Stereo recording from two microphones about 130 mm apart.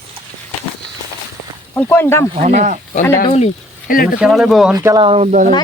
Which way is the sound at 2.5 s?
60° right (ahead or behind).